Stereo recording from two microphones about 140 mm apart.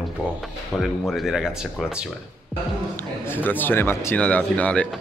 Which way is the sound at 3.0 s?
15° left (ahead or behind).